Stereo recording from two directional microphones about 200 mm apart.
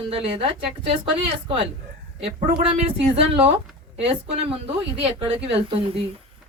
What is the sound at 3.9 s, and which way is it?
Speech, 30° right (ahead or behind).